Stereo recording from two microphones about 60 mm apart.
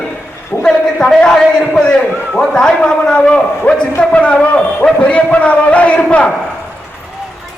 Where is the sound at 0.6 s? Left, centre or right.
Centre.